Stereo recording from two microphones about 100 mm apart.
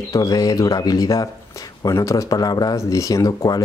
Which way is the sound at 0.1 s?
40° left (ahead or behind).